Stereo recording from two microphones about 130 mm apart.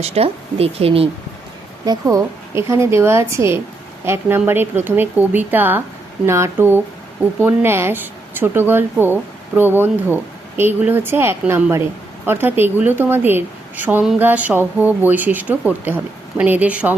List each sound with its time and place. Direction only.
0.0 s speech: 50° right (ahead or behind)
1.8 s a woman's voice: 30° right (ahead or behind); by 17.0 s 10° right (ahead or behind)